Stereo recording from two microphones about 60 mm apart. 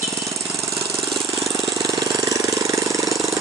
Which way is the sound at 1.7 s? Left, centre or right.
Right.